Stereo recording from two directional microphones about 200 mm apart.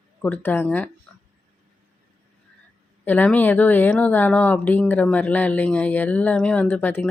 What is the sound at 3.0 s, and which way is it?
Speech, 10° left (ahead or behind).